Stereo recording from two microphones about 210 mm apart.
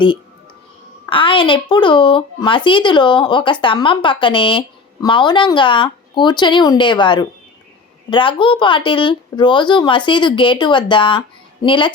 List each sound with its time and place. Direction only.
1.1 s speech: 25° left (ahead or behind)